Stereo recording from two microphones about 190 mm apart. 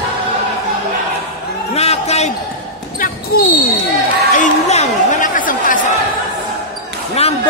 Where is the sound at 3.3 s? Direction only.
55° left (ahead or behind).